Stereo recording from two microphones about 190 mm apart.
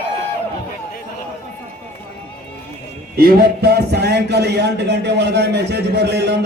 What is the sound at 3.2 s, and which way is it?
A man's voice, 55° right (ahead or behind).